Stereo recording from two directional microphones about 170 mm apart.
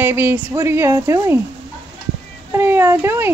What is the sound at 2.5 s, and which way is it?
Speech, 15° right (ahead or behind).